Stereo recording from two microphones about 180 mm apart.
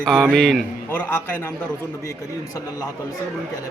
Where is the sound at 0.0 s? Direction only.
Centre (ahead or behind).